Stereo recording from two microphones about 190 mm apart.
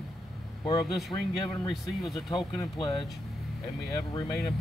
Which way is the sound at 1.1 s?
25° left (ahead or behind).